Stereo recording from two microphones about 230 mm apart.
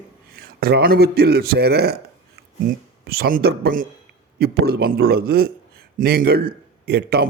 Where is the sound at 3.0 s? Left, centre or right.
Right.